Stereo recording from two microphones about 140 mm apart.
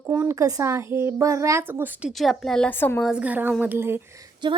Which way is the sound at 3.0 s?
5° right (ahead or behind).